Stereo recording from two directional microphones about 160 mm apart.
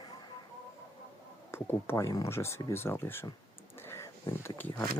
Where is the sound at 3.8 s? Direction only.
15° left (ahead or behind).